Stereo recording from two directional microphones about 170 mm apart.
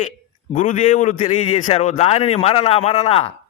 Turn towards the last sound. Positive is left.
turn(degrees=35)  # may be behind; listen again after turning